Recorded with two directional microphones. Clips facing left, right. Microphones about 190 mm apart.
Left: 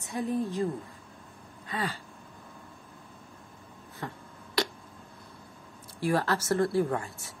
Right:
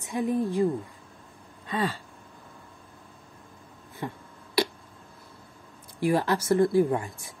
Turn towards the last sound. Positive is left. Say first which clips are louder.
# right 4 dB
turn(degrees=-15)  # may be behind; listen again after turning